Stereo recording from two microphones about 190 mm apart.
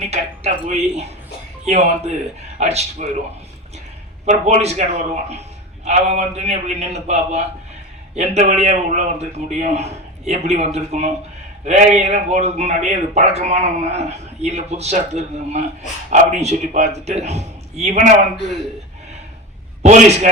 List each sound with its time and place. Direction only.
0.1 s a man's voice: 35° right (ahead or behind)
4.3 s a man's voice: 35° right (ahead or behind)
19.8 s a man's voice: 35° right (ahead or behind)